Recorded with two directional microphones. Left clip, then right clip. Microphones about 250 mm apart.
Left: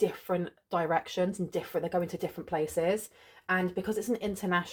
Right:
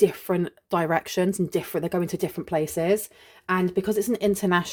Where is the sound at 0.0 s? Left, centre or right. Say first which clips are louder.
Right 8 dB; right.